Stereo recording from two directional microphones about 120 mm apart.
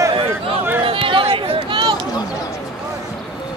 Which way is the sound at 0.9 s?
45° right (ahead or behind).